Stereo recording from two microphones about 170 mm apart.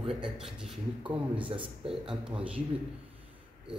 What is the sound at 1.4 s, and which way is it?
Speech, 30° right (ahead or behind).